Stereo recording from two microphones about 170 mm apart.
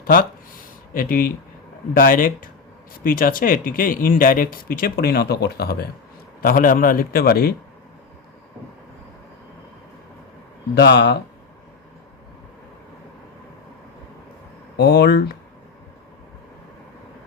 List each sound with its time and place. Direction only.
0.0 s a sound: 60° left (ahead or behind)
1.9 s speech: 55° left (ahead or behind)
6.4 s speech: 55° left (ahead or behind)
10.8 s speech: 90° left
14.8 s speech: 70° left (ahead or behind)